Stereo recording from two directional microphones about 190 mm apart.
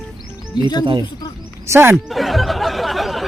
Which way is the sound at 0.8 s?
25° right (ahead or behind).